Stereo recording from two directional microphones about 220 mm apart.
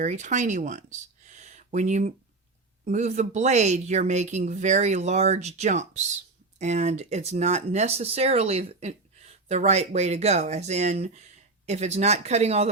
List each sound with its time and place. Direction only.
0.0 s speech: 35° right (ahead or behind)